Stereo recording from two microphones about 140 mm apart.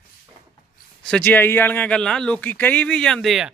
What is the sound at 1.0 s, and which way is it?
Speech, 10° left (ahead or behind).